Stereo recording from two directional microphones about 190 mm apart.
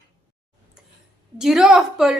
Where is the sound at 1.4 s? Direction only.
5° right (ahead or behind).